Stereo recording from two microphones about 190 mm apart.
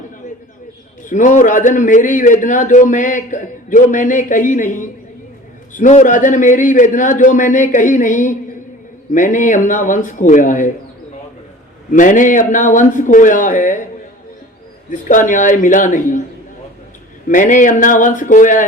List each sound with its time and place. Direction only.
1.0 s a man's voice: 40° left (ahead or behind)
11.9 s a man's voice: 45° left (ahead or behind)
14.8 s a man's voice: 40° left (ahead or behind)
17.2 s a man's voice: 45° left (ahead or behind)